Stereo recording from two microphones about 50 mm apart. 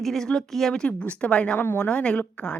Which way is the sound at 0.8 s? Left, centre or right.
Left.